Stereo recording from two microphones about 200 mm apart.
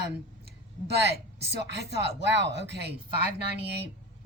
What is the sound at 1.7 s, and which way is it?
Speech, 60° right (ahead or behind).